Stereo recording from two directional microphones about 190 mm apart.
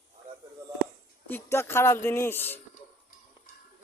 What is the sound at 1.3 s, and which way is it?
Speech, 10° left (ahead or behind).